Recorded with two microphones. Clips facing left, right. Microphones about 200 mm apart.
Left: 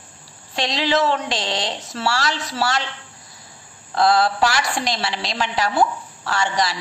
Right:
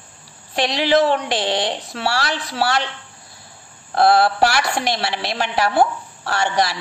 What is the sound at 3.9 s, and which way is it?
A woman's voice, 60° right (ahead or behind).